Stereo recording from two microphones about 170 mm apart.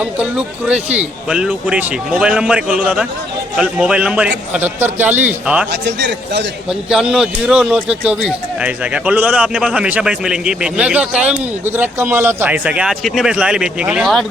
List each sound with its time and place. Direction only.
0.0 s speech: 5° right (ahead or behind)
5.7 s a man's voice: 90° right
6.7 s speech: 5° right (ahead or behind)